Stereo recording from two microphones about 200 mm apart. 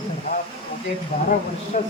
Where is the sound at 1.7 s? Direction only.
40° left (ahead or behind).